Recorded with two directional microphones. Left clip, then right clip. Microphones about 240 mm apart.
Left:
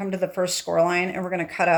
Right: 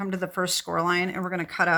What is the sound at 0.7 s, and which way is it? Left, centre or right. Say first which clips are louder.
Speech: left 9 dB; right.